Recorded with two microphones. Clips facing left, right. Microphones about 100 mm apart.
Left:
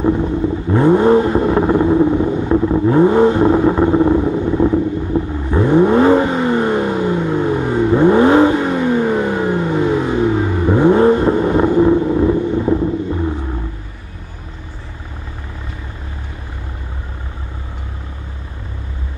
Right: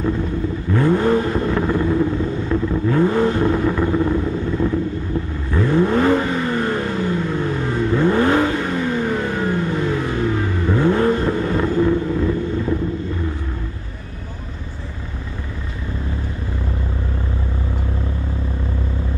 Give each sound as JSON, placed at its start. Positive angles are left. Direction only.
{"t": 0.0, "sound": "vehicle", "side_deg": 20}